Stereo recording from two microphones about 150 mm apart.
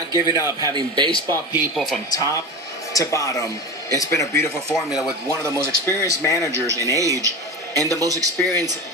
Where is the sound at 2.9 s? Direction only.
20° left (ahead or behind).